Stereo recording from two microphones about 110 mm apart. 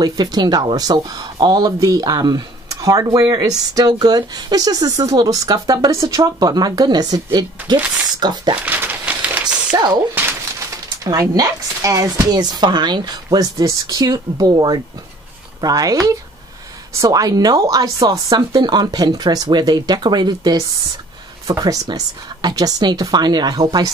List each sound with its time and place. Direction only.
0.0 s speech: 35° right (ahead or behind)
7.7 s speech: 10° right (ahead or behind)
8.2 s speech: 40° right (ahead or behind)
8.6 s a sound: 15° right (ahead or behind)
11.1 s speech: 30° right (ahead or behind)